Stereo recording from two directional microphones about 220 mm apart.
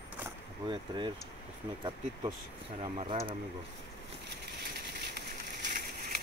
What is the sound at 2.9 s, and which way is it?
Speech, 30° right (ahead or behind).